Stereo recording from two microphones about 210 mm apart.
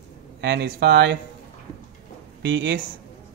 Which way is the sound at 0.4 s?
55° right (ahead or behind).